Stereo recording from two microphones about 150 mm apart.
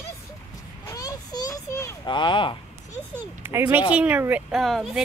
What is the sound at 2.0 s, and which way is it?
Speech, 30° left (ahead or behind).